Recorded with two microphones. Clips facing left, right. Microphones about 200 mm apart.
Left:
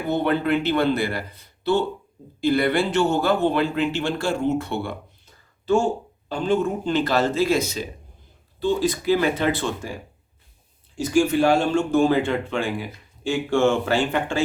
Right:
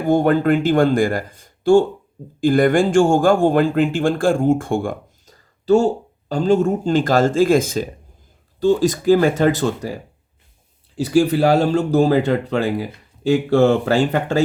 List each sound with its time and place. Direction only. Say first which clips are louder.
0.0 s speech: right 6 dB; 45° right (ahead or behind)